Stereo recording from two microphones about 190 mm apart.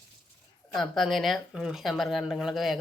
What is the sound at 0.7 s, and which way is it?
Speech, centre (ahead or behind).